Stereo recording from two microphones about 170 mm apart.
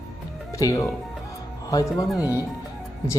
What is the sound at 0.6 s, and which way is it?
Speech, 20° left (ahead or behind).